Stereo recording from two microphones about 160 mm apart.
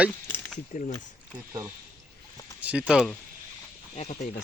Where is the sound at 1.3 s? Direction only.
15° right (ahead or behind); by 3.1 s centre (ahead or behind).